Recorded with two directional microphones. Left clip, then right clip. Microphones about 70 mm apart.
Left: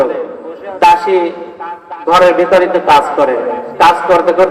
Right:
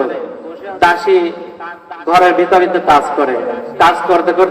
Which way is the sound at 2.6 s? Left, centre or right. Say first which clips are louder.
Left 2 dB; left.